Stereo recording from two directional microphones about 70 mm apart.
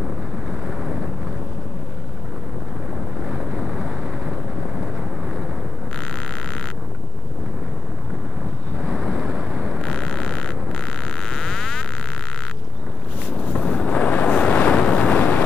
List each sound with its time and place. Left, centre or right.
3.3 s boat: centre
8.8 s vehicle: centre
9.8 s a sound: centre
13.7 s waves: centre
15.1 s vehicle: left